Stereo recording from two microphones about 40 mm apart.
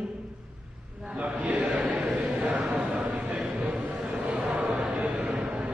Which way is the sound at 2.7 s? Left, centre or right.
Right.